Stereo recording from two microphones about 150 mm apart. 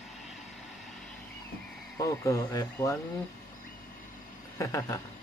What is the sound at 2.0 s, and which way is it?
Speech, 20° left (ahead or behind).